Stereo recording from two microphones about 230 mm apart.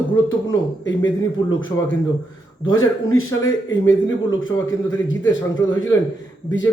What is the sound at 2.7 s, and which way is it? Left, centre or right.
A man's voice, left.